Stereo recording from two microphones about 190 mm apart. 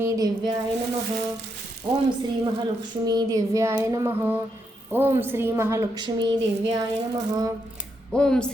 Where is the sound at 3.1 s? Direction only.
20° right (ahead or behind).